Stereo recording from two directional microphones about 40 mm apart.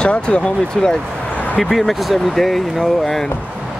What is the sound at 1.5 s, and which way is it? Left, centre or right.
Speech, centre.